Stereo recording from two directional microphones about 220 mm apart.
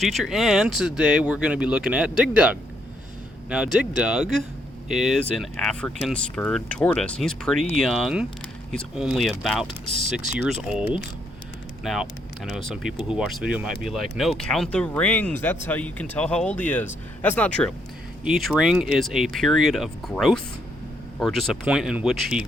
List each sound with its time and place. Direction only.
0.0 s speech: centre (ahead or behind)
9.8 s speech: 30° right (ahead or behind)
10.3 s speech: centre (ahead or behind)